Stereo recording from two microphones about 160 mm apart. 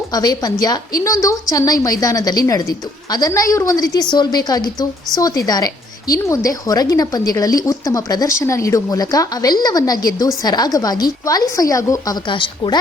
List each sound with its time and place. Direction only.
0.1 s a woman's voice: 25° left (ahead or behind)